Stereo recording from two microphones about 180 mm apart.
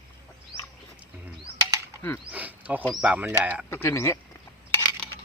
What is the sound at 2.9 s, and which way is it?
Speech, 5° right (ahead or behind).